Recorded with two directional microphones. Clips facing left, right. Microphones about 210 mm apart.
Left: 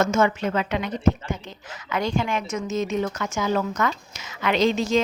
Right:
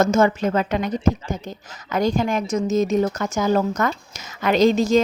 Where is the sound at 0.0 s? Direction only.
35° right (ahead or behind).